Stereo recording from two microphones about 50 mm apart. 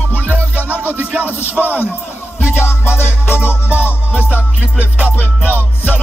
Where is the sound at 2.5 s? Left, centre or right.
Left.